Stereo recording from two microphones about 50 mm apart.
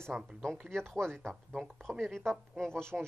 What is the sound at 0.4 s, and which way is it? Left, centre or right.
Speech, centre.